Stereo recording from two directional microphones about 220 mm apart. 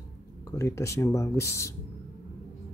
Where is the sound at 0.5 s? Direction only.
15° left (ahead or behind).